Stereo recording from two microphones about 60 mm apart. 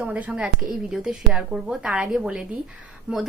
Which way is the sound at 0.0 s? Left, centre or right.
Right.